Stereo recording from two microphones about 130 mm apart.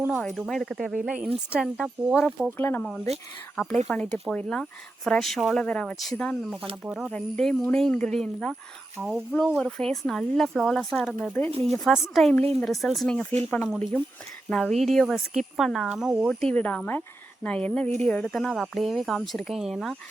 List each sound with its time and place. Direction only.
0.1 s speech: 5° left (ahead or behind)
2.6 s speech: 15° left (ahead or behind)
6.8 s speech: 5° right (ahead or behind)
7.1 s speech: 5° left (ahead or behind)
16.2 s speech: 5° left (ahead or behind)
17.8 s a woman's voice: 60° right (ahead or behind)
18.1 s speech: 5° left (ahead or behind)